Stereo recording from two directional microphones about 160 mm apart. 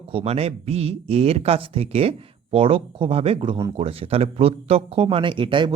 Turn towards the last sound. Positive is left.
turn(degrees=-30)  # may be behind; listen again after turning